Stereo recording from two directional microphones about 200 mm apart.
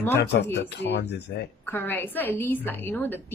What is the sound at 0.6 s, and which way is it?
Speech, 55° left (ahead or behind).